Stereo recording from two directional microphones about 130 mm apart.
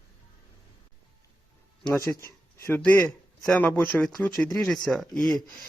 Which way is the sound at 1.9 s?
20° left (ahead or behind).